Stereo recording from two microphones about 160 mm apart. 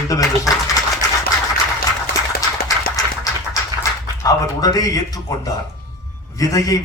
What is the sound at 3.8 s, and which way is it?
A man's voice, 20° left (ahead or behind).